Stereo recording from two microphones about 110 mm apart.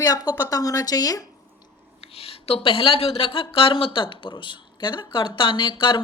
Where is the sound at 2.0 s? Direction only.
65° left (ahead or behind).